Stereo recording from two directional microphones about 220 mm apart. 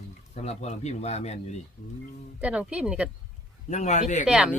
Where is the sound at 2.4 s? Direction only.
5° right (ahead or behind).